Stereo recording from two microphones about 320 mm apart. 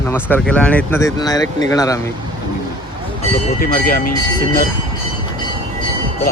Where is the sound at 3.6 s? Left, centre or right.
Left.